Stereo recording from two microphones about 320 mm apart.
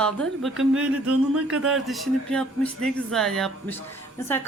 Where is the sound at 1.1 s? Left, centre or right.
Right.